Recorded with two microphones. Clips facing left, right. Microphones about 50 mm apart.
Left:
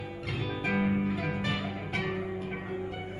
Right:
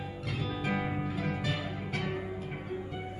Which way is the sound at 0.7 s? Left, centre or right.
Left.